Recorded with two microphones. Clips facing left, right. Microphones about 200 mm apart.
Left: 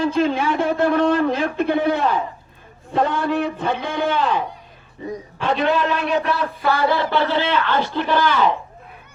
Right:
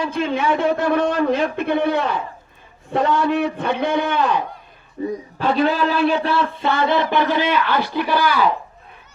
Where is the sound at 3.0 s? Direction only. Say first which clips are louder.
Right 2 dB; 55° left (ahead or behind).